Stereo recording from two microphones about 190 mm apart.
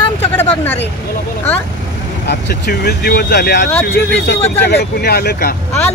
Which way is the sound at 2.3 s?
55° left (ahead or behind).